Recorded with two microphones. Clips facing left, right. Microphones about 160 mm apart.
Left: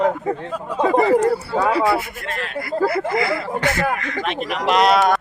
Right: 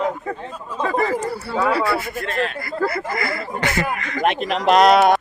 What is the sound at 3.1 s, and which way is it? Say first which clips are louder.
Speech: left 5 dB; 10° left (ahead or behind).